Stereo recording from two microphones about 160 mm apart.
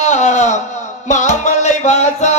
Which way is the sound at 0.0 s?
45° left (ahead or behind).